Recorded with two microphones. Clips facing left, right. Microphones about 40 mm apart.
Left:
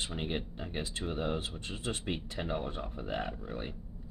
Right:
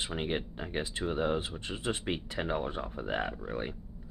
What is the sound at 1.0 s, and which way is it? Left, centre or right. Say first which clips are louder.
Speech: right 4 dB; centre.